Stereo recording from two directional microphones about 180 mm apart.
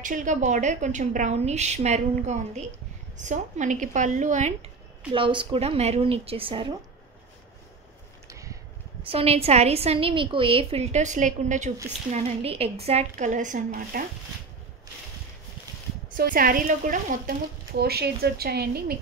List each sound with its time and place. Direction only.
0.0 s a woman's voice: 45° right (ahead or behind)
5.1 s a woman's voice: 30° right (ahead or behind)
8.3 s a sound: 15° right (ahead or behind)
9.1 s a woman's voice: 35° right (ahead or behind)
16.1 s speech: 50° right (ahead or behind)